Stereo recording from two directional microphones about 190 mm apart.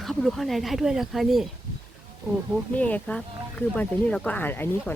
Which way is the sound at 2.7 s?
5° left (ahead or behind).